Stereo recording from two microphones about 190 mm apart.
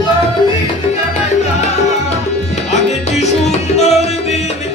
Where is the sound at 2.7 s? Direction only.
35° left (ahead or behind).